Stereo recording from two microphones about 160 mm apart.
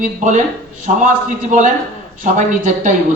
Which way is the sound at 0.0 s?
50° right (ahead or behind).